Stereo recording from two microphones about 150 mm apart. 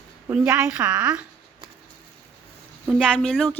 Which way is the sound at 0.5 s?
10° right (ahead or behind).